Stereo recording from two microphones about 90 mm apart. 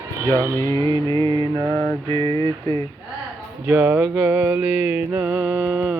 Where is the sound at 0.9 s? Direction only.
60° right (ahead or behind); by 1.9 s 45° right (ahead or behind).